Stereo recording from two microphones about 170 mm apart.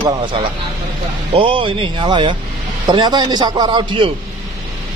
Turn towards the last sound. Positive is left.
turn(degrees=-30)  # may be behind; listen again after turning